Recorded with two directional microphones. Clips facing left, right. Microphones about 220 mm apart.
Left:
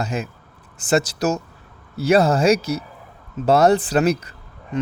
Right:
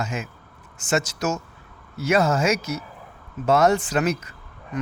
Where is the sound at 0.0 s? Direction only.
35° left (ahead or behind).